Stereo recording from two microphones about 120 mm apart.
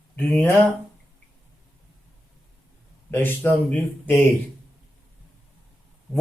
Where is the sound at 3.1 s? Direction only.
15° left (ahead or behind).